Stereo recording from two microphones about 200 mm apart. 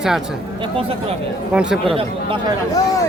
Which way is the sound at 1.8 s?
25° right (ahead or behind).